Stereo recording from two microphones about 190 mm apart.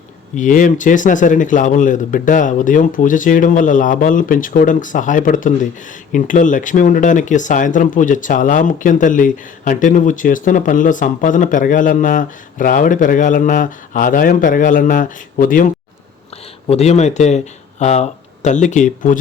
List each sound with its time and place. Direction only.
0.3 s speech: 45° left (ahead or behind)
16.6 s speech: 35° left (ahead or behind)